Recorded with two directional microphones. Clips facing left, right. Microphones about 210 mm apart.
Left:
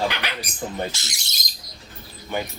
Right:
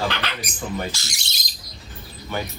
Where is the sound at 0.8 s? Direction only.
20° left (ahead or behind).